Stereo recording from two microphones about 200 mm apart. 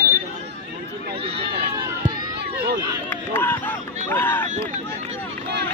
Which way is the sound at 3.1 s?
10° left (ahead or behind).